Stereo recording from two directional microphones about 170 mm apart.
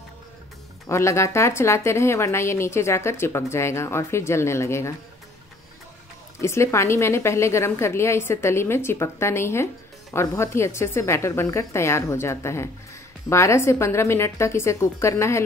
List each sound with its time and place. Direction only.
0.8 s a woman's voice: 15° left (ahead or behind)
6.4 s a woman's voice: 15° left (ahead or behind)